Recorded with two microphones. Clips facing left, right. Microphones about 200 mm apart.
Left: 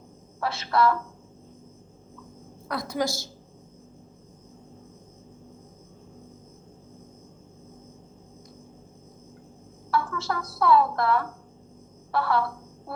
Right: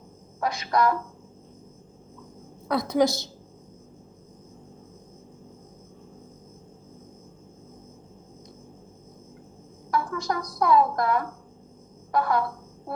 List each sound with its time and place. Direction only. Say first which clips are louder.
0.3 s a woman's voice: even; 15° right (ahead or behind)
2.6 s a woman's voice: right 6 dB; 20° right (ahead or behind)
9.9 s a woman's voice: right 1 dB; 15° right (ahead or behind)